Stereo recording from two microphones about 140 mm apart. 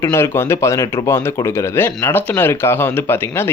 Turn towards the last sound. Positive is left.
turn(degrees=15)  # may be behind; listen again after turning